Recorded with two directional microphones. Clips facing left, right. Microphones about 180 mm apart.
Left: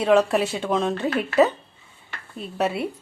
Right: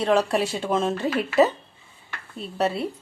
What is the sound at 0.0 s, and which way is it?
Speech, 5° left (ahead or behind).